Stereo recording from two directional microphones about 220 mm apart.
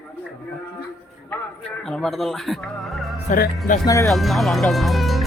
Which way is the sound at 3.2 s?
35° left (ahead or behind).